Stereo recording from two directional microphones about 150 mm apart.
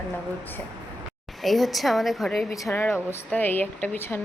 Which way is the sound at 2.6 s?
15° left (ahead or behind).